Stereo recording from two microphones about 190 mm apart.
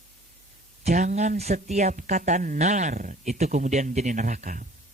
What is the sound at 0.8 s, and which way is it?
Speech, 40° right (ahead or behind).